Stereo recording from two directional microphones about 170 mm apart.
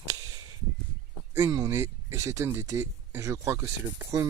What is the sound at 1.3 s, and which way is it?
Speech, 20° right (ahead or behind).